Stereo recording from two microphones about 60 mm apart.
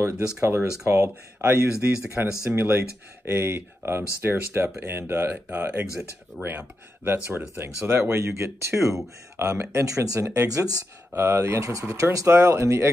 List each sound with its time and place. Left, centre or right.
0.0 s speech: right
6.4 s speech: centre
7.3 s speech: right
10.5 s speech: right
11.1 s speech: right
11.6 s speech: right
12.3 s speech: right